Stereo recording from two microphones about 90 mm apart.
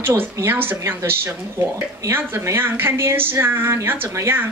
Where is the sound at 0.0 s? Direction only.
30° right (ahead or behind).